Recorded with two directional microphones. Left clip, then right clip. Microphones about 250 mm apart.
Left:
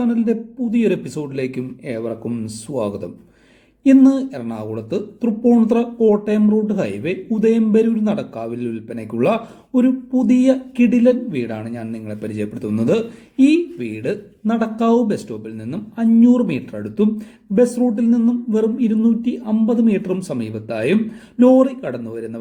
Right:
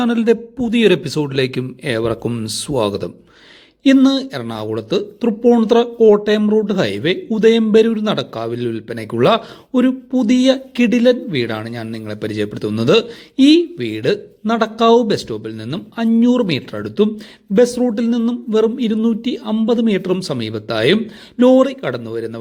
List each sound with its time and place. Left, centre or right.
0.0 s a man's voice: right